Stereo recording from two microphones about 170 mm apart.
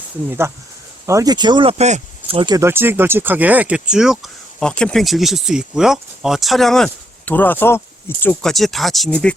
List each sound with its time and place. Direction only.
0.3 s speech: 15° right (ahead or behind)
1.8 s speech: 40° right (ahead or behind)
2.6 s speech: 15° right (ahead or behind); by 9.3 s 5° left (ahead or behind)